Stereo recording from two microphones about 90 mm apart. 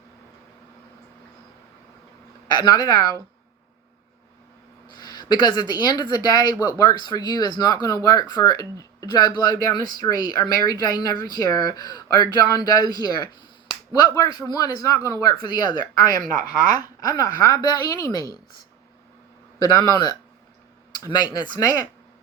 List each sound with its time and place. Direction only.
2.5 s speech: 50° left (ahead or behind)
4.9 s speech: 50° left (ahead or behind)
19.5 s speech: 45° left (ahead or behind)